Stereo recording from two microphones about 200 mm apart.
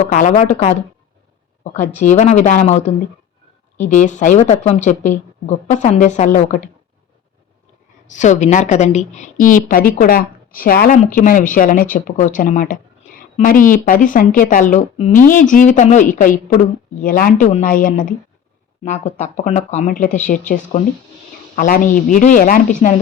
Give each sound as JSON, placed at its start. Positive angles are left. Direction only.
{"t": 0.1, "sound": "a woman's voice", "side_deg": 40}
{"t": 2.0, "sound": "a woman's voice", "side_deg": 35}
{"t": 8.0, "sound": "a woman's voice", "side_deg": 40}
{"t": 15.2, "sound": "a woman's voice", "side_deg": 45}